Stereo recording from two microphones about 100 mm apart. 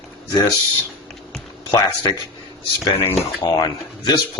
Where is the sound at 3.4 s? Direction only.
40° left (ahead or behind).